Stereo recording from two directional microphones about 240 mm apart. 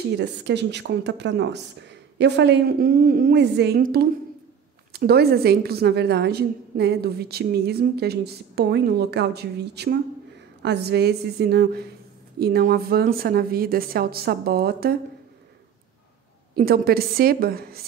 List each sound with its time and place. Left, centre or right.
0.2 s a woman's voice: right
16.5 s a woman's voice: right